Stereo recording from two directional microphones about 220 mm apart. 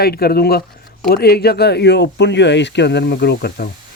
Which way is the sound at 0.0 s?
45° left (ahead or behind).